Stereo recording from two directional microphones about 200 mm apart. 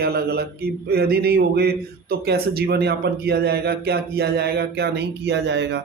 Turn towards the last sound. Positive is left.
turn(degrees=-60)  # may be behind; listen again after turning